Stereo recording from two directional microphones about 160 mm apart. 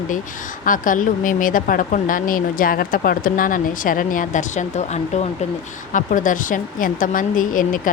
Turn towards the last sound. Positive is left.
turn(degrees=55)  # may be behind; listen again after turning